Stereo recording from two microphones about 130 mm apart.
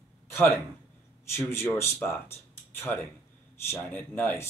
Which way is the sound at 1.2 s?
20° left (ahead or behind).